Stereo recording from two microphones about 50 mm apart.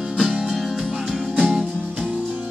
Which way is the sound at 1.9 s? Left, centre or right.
Right.